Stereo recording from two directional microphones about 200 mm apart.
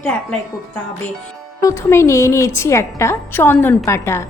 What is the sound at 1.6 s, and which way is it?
A woman's voice, 15° left (ahead or behind).